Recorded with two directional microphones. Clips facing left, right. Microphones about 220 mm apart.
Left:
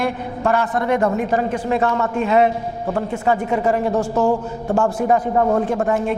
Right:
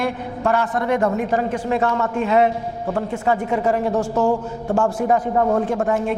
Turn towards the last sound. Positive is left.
turn(degrees=20)  # may be behind; listen again after turning